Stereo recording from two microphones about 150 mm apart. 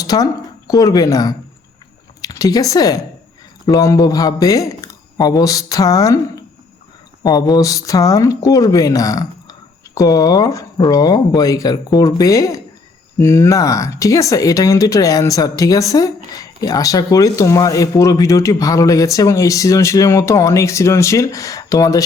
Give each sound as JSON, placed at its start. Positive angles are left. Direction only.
{"t": 0.0, "sound": "speech", "side_deg": 25}